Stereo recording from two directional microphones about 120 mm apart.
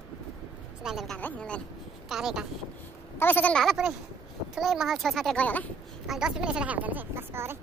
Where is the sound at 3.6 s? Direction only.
5° right (ahead or behind).